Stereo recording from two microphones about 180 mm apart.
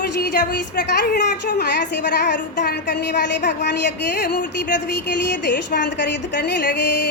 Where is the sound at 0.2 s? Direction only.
65° left (ahead or behind).